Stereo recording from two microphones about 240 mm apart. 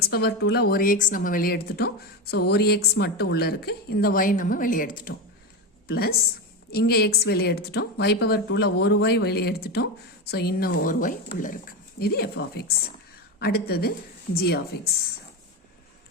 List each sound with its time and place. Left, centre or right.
0.0 s a woman's voice: left